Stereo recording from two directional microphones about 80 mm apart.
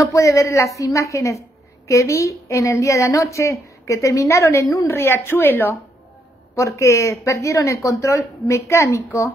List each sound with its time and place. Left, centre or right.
0.0 s a woman's voice: left
6.5 s a woman's voice: left